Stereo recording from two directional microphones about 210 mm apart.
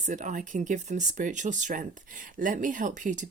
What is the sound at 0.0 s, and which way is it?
Speech, 35° right (ahead or behind).